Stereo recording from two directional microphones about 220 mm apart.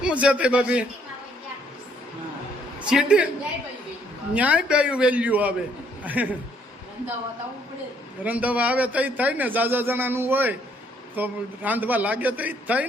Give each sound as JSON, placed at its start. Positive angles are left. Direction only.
{"t": 0.0, "sound": "a man's voice", "side_deg": -5}
{"t": 2.8, "sound": "a man's voice", "side_deg": -5}
{"t": 4.4, "sound": "a man's voice", "side_deg": -5}
{"t": 8.2, "sound": "a man's voice", "side_deg": -5}